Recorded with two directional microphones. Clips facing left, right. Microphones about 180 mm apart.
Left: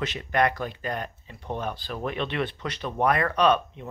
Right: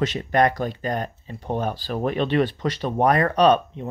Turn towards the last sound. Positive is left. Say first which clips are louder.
# right 5 dB
turn(degrees=-40)  # may be behind; listen again after turning